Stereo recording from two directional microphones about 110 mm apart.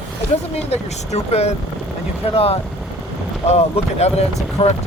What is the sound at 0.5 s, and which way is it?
Speech, 70° left (ahead or behind).